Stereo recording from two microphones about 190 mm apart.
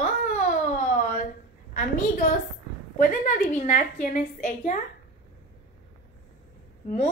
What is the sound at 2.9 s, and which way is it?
A woman's voice, 45° left (ahead or behind).